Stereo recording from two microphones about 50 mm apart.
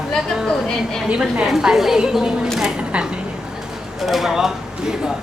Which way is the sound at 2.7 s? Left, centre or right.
Right.